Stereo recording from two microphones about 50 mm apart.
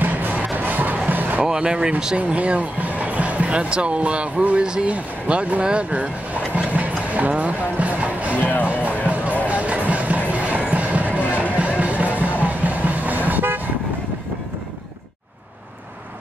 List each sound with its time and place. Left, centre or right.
0.0 s music: right
0.6 s a sound: right
1.4 s speech: centre
2.1 s speech: right
6.5 s music: right
8.4 s music: left
8.8 s music: right
12.4 s toot: right